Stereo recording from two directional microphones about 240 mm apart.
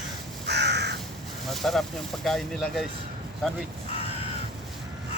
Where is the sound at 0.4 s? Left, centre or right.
Right.